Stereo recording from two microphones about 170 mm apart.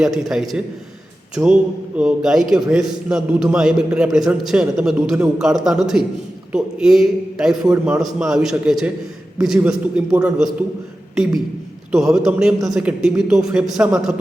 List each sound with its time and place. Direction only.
0.0 s a man's voice: centre (ahead or behind)
1.4 s a man's voice: 15° right (ahead or behind)
2.0 s a man's voice: 5° right (ahead or behind)
11.9 s a man's voice: 5° right (ahead or behind)